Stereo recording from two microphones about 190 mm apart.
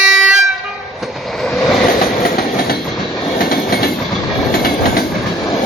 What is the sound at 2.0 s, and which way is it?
Train, 50° left (ahead or behind).